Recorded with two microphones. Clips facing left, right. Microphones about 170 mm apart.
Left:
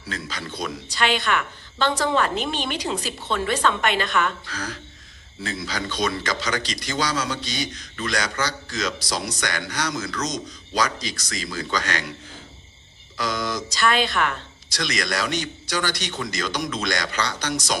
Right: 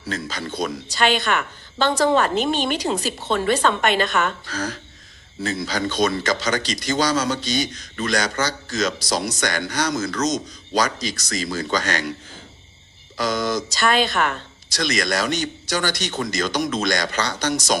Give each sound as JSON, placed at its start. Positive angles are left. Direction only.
{"t": 0.1, "sound": "a man's voice", "side_deg": -45}
{"t": 13.1, "sound": "a man's voice", "side_deg": -45}